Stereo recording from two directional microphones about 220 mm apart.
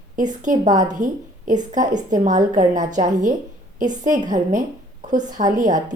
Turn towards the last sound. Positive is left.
turn(degrees=-35)  # may be behind; listen again after turning